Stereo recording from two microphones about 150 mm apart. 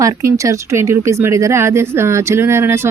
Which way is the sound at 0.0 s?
20° right (ahead or behind).